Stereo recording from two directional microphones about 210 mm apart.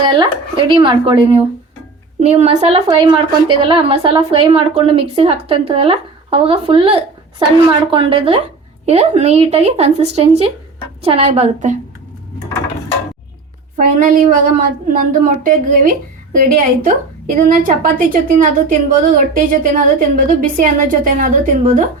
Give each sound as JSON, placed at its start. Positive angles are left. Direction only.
{"t": 0.0, "sound": "a woman's voice", "side_deg": -20}
{"t": 13.7, "sound": "a woman's voice", "side_deg": -40}